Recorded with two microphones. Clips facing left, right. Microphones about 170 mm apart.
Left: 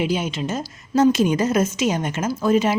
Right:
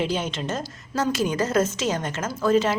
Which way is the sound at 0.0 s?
10° left (ahead or behind).